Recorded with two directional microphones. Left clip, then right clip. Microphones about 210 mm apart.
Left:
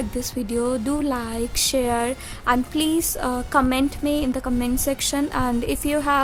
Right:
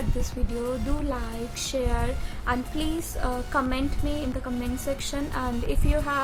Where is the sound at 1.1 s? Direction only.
50° left (ahead or behind).